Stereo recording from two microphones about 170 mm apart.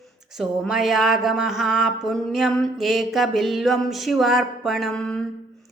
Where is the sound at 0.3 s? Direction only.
Centre (ahead or behind).